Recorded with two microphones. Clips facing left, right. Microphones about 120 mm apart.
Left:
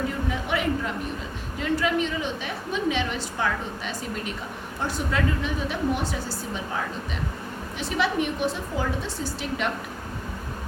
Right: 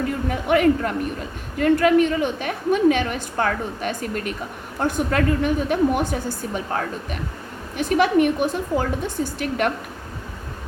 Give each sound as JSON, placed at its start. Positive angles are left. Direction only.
{"t": 0.3, "sound": "a woman's voice", "side_deg": -55}
{"t": 7.8, "sound": "a woman's voice", "side_deg": -50}